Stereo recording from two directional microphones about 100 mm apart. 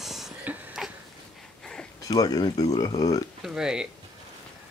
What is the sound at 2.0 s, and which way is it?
Speech, 40° left (ahead or behind).